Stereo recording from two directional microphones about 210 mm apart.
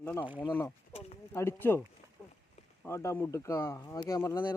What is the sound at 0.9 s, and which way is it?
Speech, 30° left (ahead or behind).